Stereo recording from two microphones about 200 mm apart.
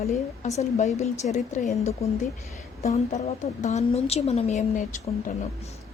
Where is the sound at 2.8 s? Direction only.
30° left (ahead or behind).